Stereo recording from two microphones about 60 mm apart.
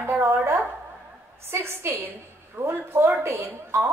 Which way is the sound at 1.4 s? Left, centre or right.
Right.